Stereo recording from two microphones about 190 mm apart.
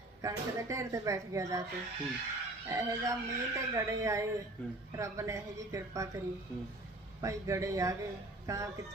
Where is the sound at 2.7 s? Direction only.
15° right (ahead or behind).